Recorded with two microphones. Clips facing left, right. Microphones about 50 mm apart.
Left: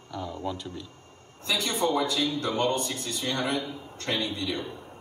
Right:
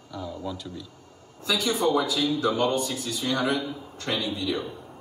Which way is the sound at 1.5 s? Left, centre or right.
Left.